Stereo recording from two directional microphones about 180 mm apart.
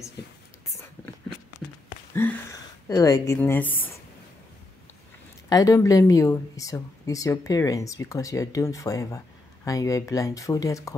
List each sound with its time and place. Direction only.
2.2 s a woman's voice: 10° left (ahead or behind)
5.5 s speech: 20° left (ahead or behind)